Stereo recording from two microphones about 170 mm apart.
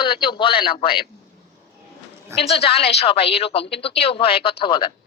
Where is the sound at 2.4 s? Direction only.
35° left (ahead or behind).